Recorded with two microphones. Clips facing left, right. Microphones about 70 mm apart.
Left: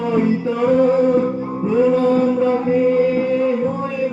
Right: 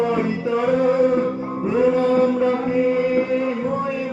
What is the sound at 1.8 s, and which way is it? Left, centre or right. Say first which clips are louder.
Chant: even; centre.